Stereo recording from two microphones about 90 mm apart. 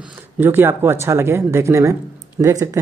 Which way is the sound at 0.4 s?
25° right (ahead or behind).